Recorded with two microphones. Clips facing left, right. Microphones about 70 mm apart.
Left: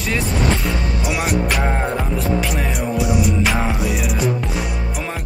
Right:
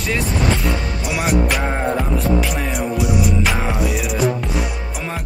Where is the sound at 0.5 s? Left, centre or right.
Centre.